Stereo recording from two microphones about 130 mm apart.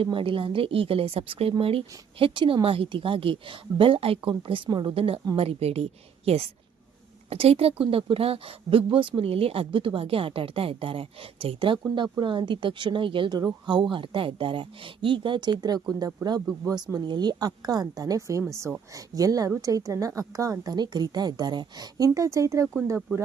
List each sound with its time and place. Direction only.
0.0 s a woman's voice: 40° right (ahead or behind); by 22.6 s 25° right (ahead or behind)